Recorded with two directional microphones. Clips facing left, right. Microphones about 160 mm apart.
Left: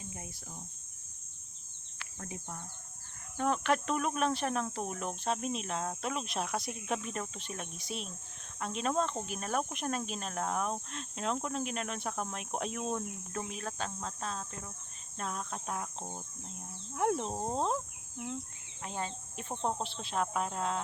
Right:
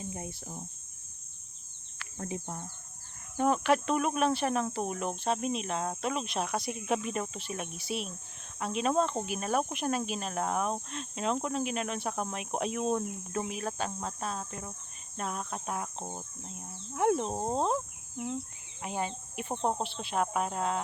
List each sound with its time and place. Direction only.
0.0 s cricket: 30° right (ahead or behind)
2.1 s speech: 30° right (ahead or behind)
3.3 s speech: 10° right (ahead or behind)
17.2 s speech: 20° right (ahead or behind)
18.8 s speech: 10° right (ahead or behind)